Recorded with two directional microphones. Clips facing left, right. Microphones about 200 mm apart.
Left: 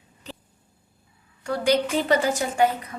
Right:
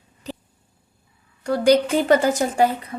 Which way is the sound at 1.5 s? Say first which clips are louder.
Right 5 dB; 40° right (ahead or behind).